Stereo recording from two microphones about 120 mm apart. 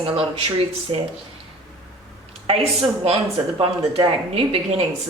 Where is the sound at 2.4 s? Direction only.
55° right (ahead or behind).